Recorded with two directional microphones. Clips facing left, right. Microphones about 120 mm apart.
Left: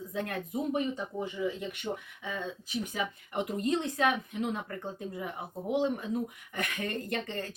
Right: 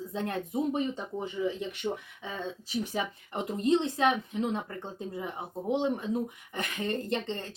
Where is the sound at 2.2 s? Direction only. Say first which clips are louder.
Left 1 dB; 30° right (ahead or behind).